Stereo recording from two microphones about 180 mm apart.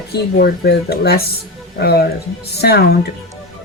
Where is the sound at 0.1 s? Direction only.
60° left (ahead or behind).